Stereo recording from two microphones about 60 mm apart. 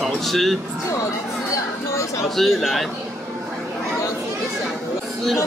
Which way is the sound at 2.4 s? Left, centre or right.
Centre.